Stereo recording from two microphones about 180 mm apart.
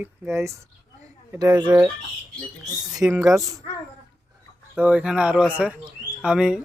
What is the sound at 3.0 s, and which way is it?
Speech, 15° right (ahead or behind).